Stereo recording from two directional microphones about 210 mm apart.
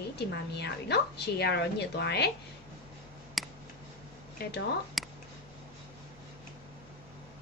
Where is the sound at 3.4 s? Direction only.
Centre (ahead or behind).